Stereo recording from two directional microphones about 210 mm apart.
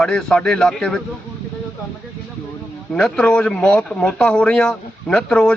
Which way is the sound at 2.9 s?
5° left (ahead or behind).